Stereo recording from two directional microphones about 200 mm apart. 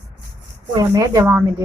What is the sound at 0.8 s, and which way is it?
Speech, 15° right (ahead or behind).